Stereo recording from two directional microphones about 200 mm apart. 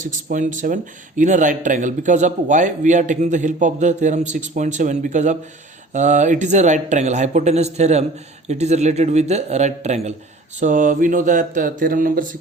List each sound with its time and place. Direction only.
0.0 s speech: 40° right (ahead or behind)